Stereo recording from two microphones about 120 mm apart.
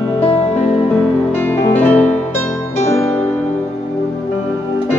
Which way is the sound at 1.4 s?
20° left (ahead or behind).